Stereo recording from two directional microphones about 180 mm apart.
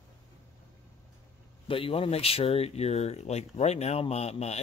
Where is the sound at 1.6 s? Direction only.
30° left (ahead or behind).